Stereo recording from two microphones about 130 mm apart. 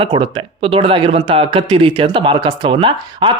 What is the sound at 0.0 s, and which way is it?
Speech, 40° right (ahead or behind).